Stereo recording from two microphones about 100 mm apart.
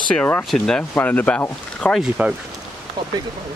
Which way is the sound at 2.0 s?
10° right (ahead or behind).